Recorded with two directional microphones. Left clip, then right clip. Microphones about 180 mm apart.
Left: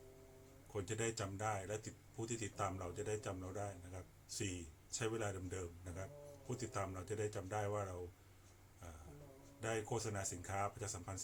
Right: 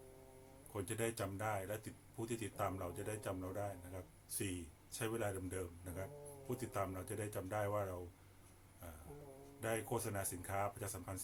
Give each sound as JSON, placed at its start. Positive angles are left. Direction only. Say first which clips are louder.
{"t": 0.7, "sound": "speech", "louder": "even", "side_deg": -5}
{"t": 9.6, "sound": "speech", "louder": "right 1 dB", "side_deg": -5}